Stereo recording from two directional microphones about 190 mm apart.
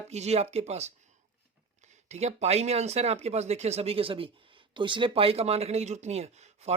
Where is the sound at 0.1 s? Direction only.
35° right (ahead or behind).